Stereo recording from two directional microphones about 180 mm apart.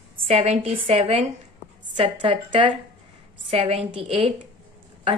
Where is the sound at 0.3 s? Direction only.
40° right (ahead or behind).